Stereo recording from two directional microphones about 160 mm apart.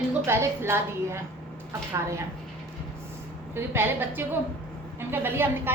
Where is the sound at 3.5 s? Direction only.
15° right (ahead or behind).